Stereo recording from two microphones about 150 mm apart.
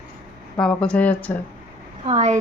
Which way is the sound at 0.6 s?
5° left (ahead or behind).